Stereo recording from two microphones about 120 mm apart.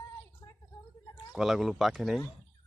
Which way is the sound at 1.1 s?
5° right (ahead or behind).